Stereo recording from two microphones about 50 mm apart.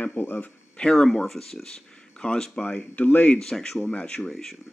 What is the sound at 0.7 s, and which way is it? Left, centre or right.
Speech, centre.